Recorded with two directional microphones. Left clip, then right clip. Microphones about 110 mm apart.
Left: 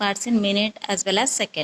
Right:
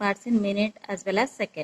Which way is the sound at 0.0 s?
25° left (ahead or behind).